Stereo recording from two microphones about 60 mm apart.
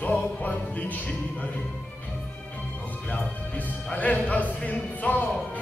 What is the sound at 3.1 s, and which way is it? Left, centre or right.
Speech, left.